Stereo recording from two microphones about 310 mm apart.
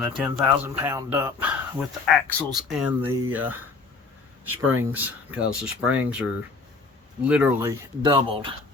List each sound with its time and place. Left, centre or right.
0.0 s speech: centre
4.6 s speech: centre
7.3 s speech: centre
8.0 s speech: centre